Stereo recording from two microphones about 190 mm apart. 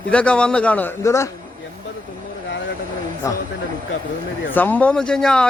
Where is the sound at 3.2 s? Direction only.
15° left (ahead or behind).